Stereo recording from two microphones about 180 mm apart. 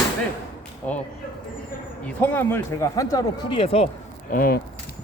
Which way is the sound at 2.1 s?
10° left (ahead or behind).